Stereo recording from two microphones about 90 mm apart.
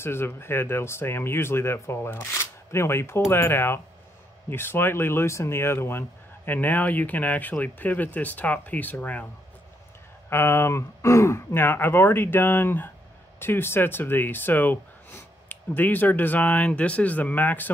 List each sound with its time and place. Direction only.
0.0 s speech: 25° left (ahead or behind)
10.3 s speech: 30° left (ahead or behind)